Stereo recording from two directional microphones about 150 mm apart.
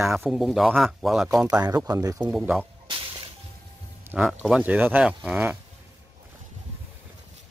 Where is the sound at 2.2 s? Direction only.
5° right (ahead or behind).